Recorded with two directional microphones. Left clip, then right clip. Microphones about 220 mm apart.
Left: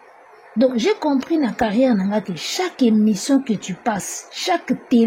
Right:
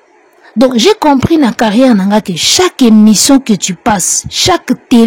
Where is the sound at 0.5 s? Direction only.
40° right (ahead or behind).